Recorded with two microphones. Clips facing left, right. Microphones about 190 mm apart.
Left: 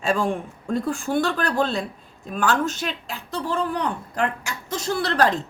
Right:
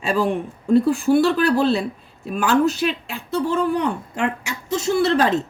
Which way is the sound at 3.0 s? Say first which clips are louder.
Right 6 dB; 35° left (ahead or behind).